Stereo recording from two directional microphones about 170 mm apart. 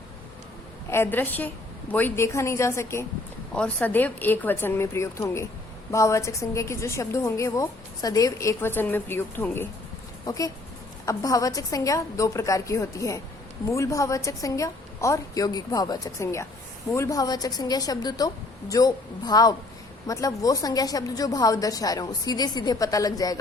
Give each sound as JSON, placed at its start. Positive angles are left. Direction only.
{"t": 0.9, "sound": "a woman's voice", "side_deg": 15}
{"t": 3.5, "sound": "a woman's voice", "side_deg": 5}